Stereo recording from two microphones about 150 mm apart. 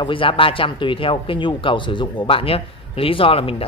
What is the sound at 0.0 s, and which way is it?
Speech, 35° left (ahead or behind).